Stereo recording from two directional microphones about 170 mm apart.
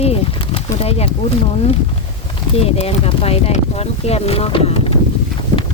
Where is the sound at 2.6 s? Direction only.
35° left (ahead or behind).